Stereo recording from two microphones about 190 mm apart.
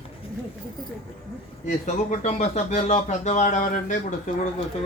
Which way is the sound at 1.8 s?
40° left (ahead or behind).